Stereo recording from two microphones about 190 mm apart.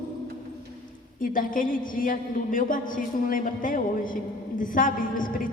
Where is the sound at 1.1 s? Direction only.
45° left (ahead or behind).